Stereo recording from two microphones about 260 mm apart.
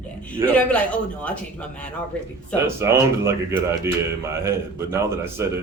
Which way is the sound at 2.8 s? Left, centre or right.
Centre.